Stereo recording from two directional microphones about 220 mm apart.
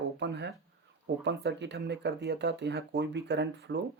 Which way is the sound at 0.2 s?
50° right (ahead or behind).